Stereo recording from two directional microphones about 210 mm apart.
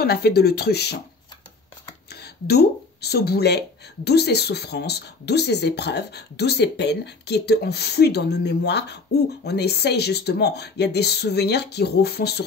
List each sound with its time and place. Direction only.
0.0 s speech: 50° left (ahead or behind)
2.0 s speech: 50° left (ahead or behind)